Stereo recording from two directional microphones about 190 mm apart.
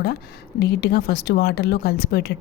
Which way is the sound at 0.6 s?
60° left (ahead or behind).